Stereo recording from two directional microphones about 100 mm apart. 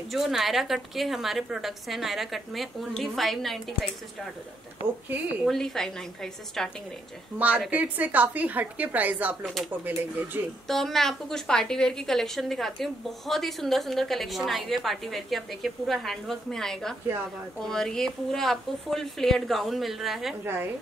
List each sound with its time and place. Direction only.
0.1 s a woman's voice: centre (ahead or behind)
5.5 s a woman's voice: 5° left (ahead or behind)
7.3 s a woman's voice: 15° right (ahead or behind)
9.4 s a woman's voice: 5° left (ahead or behind)
9.7 s speech: 20° right (ahead or behind)
10.7 s a woman's voice: 5° left (ahead or behind)
20.4 s speech: 20° right (ahead or behind)